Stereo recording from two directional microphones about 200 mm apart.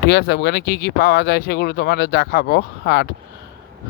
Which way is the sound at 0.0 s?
60° left (ahead or behind).